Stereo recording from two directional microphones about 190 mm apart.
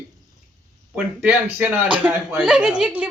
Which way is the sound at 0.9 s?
5° right (ahead or behind).